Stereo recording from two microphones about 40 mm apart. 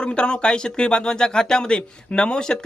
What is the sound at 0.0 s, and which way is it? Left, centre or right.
Speech, left.